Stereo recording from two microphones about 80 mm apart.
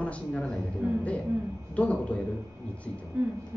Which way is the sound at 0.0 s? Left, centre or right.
Centre.